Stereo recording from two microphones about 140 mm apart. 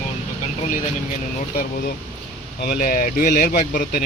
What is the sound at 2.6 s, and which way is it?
Speech, 80° left.